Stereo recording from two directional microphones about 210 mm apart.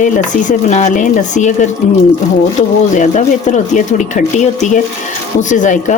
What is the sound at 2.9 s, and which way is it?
Speech, 35° left (ahead or behind).